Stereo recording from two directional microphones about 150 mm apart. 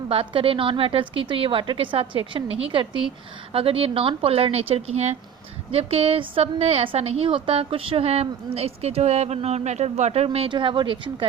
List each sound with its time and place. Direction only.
0.1 s a woman's voice: 35° right (ahead or behind)